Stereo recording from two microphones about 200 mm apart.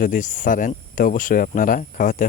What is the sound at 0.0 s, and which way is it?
Speech, 40° left (ahead or behind).